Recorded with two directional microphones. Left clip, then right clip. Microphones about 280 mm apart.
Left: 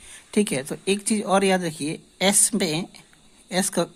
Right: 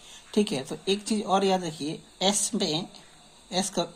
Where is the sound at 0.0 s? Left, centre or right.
Left.